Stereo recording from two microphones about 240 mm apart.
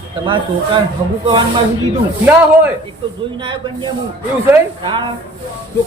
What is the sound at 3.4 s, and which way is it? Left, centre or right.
A man's voice, centre.